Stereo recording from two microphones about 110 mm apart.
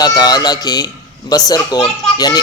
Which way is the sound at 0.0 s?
35° left (ahead or behind).